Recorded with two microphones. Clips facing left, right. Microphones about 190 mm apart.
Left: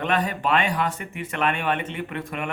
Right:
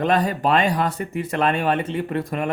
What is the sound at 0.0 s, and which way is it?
Speech, 35° right (ahead or behind).